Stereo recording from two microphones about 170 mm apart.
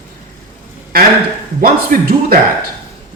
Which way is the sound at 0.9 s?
60° right (ahead or behind).